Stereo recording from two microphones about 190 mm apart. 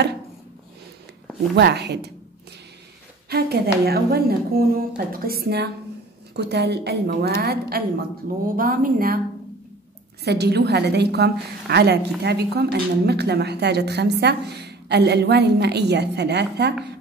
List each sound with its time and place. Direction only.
1.5 s a woman's voice: 60° right (ahead or behind)
3.3 s a woman's voice: 55° right (ahead or behind)
10.2 s a woman's voice: 60° right (ahead or behind)